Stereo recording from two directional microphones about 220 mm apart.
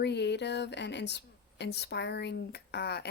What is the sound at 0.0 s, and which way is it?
Speech, 50° left (ahead or behind).